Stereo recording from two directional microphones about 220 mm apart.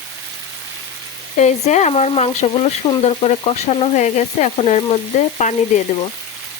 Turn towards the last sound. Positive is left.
turn(degrees=35)  # may be behind; listen again after turning